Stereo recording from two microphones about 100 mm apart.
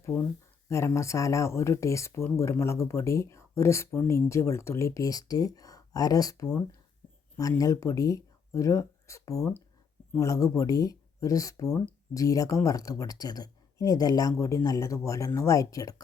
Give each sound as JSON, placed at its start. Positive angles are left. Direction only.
{"t": 0.7, "sound": "speech", "side_deg": 30}
{"t": 7.6, "sound": "speech", "side_deg": 35}